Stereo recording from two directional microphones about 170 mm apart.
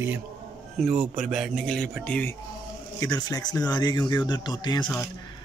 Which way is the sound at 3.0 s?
20° left (ahead or behind).